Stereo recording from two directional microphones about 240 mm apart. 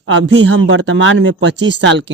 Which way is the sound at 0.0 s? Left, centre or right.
Right.